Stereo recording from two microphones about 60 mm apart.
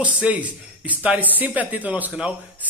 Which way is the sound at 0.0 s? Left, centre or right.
Right.